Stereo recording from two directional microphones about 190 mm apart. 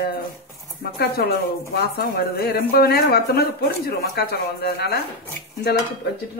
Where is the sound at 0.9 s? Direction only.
55° left (ahead or behind).